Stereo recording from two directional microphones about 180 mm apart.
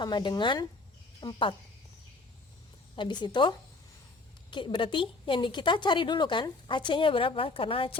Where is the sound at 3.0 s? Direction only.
25° left (ahead or behind).